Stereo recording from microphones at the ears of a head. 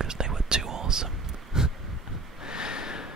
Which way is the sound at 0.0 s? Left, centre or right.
Right.